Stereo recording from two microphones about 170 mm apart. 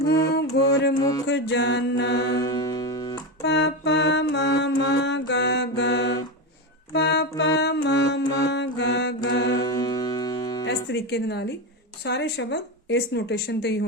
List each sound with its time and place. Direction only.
0.3 s music: 80° left
0.9 s music: 20° left (ahead or behind)
1.3 s mantra: 90° left
2.3 s music: 25° left (ahead or behind)
3.4 s mantra: 90° left
6.9 s music: 85° left
8.4 s mantra: 90° left
9.6 s music: 25° left (ahead or behind)
10.8 s a woman's voice: 80° left